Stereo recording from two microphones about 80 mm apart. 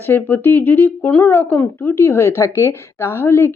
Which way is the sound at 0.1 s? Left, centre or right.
Left.